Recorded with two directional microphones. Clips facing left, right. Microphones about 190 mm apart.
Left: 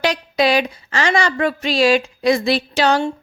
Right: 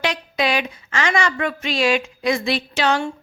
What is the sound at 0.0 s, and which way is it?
A woman's voice, 35° left (ahead or behind).